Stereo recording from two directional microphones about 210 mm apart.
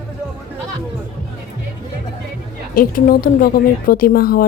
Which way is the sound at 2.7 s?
40° left (ahead or behind).